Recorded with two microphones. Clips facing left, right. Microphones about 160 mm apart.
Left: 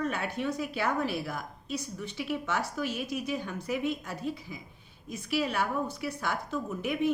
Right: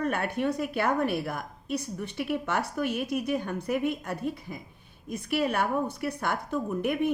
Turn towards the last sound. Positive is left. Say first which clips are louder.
# right 3 dB
turn(degrees=-55)  # may be behind; listen again after turning